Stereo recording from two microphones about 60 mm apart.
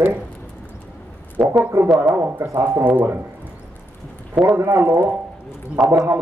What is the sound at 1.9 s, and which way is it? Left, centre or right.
Speech, right.